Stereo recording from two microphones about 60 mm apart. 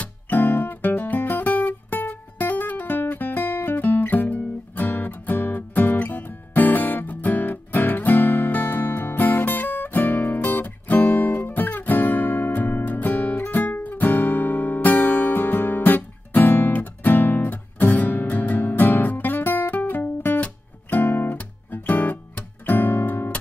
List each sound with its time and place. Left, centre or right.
0.0 s music: left